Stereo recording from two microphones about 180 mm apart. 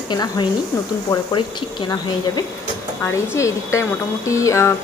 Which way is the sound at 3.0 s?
15° left (ahead or behind).